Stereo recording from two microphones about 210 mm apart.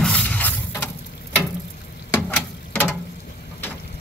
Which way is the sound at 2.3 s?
5° left (ahead or behind).